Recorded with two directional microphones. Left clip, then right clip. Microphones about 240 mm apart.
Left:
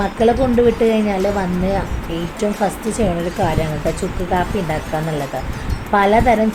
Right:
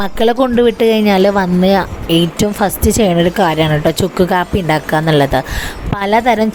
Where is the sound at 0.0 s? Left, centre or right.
Right.